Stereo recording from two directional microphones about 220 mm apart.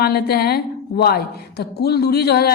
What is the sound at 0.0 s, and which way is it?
A woman's voice, 45° left (ahead or behind).